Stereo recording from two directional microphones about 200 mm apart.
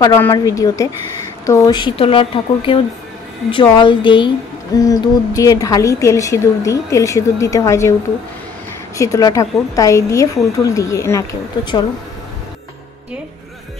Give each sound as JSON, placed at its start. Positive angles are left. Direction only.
{"t": 0.0, "sound": "a woman's voice", "side_deg": 15}
{"t": 8.9, "sound": "speech", "side_deg": 15}